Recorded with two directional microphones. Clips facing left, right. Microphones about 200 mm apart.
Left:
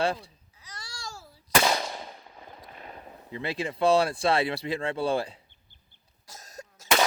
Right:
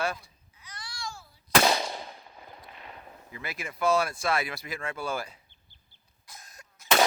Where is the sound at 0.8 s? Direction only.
40° left (ahead or behind).